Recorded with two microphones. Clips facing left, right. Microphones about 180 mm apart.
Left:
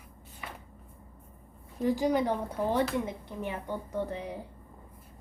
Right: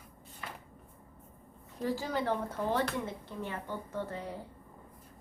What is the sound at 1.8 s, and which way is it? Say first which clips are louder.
A woman's voice: left 6 dB; 15° left (ahead or behind).